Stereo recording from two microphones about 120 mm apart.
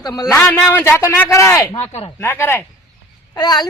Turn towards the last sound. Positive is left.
turn(degrees=35)  # may be behind; listen again after turning